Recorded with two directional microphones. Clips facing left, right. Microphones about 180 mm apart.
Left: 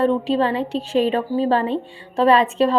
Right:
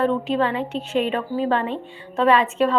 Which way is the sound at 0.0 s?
30° left (ahead or behind).